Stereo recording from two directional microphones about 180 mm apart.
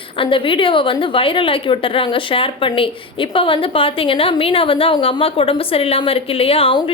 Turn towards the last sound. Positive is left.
turn(degrees=30)  # may be behind; listen again after turning